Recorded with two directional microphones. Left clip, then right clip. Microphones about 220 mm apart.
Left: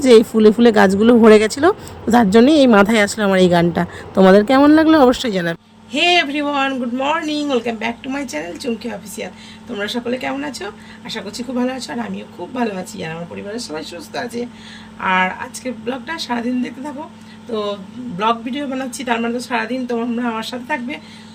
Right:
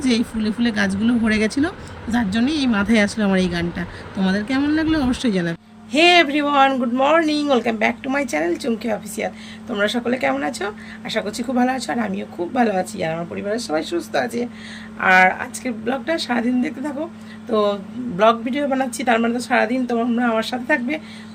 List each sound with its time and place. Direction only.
0.0 s speech: 15° left (ahead or behind)
5.9 s speech: 5° right (ahead or behind)